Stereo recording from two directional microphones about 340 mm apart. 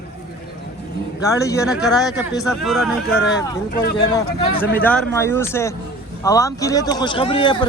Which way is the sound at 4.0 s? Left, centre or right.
Centre.